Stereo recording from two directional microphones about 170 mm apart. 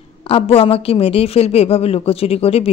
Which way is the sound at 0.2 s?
35° left (ahead or behind).